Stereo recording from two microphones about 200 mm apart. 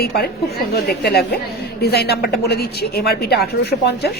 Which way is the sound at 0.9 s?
50° left (ahead or behind).